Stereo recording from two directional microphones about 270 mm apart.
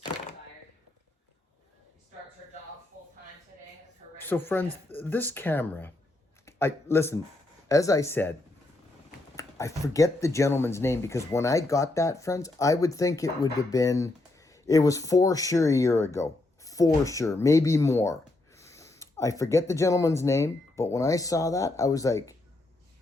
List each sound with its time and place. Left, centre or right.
4.2 s speech: centre
9.3 s speech: centre